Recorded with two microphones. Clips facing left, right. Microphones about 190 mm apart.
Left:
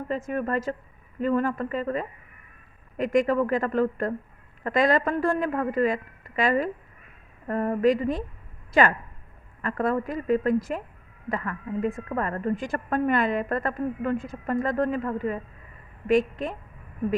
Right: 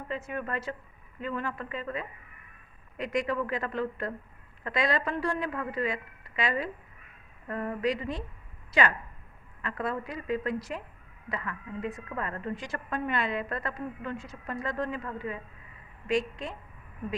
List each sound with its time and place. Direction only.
0.3 s a woman's voice: 45° left (ahead or behind)